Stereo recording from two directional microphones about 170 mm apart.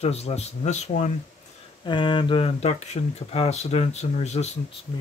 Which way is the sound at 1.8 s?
30° left (ahead or behind).